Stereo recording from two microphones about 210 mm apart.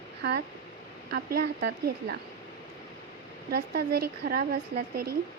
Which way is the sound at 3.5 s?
50° right (ahead or behind).